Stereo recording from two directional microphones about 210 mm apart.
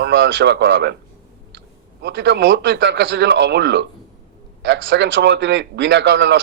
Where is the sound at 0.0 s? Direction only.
60° right (ahead or behind).